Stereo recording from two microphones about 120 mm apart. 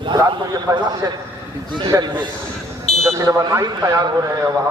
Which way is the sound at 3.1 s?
25° right (ahead or behind).